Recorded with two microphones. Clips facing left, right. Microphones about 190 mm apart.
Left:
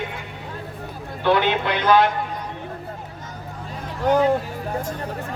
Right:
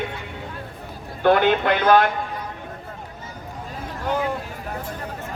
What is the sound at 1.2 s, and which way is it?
Speech, 50° right (ahead or behind).